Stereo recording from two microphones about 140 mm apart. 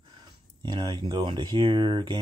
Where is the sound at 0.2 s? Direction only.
30° right (ahead or behind).